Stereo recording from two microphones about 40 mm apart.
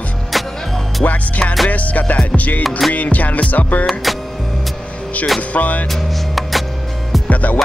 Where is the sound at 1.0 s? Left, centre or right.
Left.